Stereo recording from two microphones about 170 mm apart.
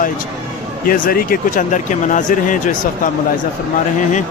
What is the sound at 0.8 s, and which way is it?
Speech, 60° left (ahead or behind).